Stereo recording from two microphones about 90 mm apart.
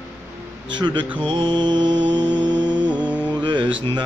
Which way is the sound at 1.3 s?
60° right (ahead or behind).